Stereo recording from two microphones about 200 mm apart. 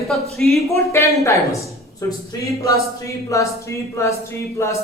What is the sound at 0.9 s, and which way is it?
Speech, 15° left (ahead or behind).